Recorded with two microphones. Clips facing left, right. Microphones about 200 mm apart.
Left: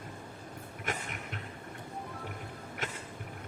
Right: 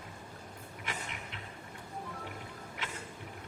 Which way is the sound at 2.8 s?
45° left (ahead or behind).